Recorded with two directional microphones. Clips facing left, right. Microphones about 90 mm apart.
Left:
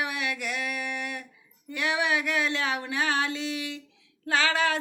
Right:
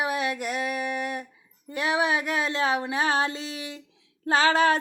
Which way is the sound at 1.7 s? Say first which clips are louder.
Right 2 dB; 35° right (ahead or behind).